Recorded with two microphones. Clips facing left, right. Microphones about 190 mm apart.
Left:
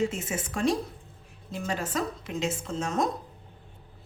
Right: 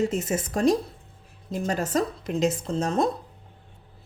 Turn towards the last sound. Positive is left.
turn(degrees=-35)  # may be behind; listen again after turning